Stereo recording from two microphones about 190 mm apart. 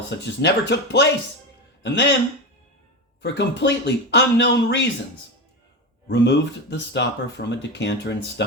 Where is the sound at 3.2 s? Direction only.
65° left (ahead or behind).